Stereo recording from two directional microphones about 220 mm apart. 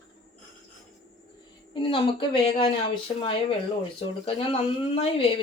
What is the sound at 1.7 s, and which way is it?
Speech, 20° left (ahead or behind).